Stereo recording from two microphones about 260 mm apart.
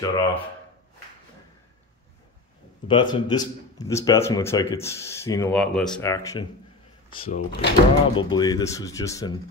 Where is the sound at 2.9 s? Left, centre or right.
Centre.